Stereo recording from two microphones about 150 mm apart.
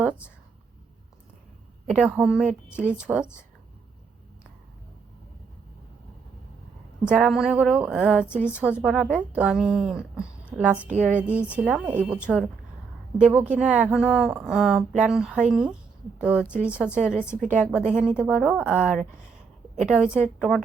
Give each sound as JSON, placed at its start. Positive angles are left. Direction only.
{"t": 1.9, "sound": "a woman's voice", "side_deg": -5}
{"t": 7.0, "sound": "a woman's voice", "side_deg": -5}
{"t": 11.0, "sound": "a woman's voice", "side_deg": 10}
{"t": 11.5, "sound": "a woman's voice", "side_deg": -10}